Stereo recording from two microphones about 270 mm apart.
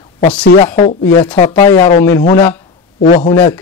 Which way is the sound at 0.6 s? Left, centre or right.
Centre.